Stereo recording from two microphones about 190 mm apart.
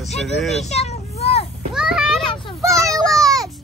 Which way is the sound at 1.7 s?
5° right (ahead or behind).